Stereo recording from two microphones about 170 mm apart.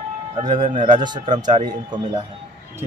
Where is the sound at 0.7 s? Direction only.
45° right (ahead or behind).